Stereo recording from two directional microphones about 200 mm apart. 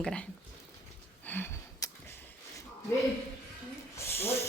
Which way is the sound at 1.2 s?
10° left (ahead or behind).